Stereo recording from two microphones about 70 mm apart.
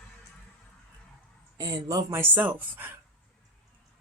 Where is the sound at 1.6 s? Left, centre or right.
Right.